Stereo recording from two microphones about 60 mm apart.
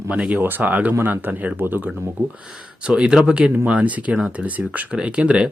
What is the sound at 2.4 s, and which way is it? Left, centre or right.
Speech, centre.